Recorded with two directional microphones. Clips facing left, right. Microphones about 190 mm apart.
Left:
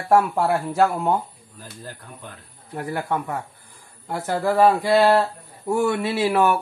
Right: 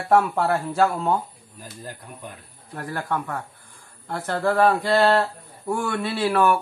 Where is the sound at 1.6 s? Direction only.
10° right (ahead or behind).